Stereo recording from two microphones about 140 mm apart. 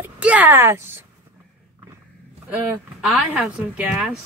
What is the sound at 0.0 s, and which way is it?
Speech, 10° right (ahead or behind).